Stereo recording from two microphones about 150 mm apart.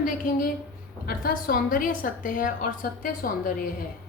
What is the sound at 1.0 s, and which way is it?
A woman's voice, 75° left (ahead or behind).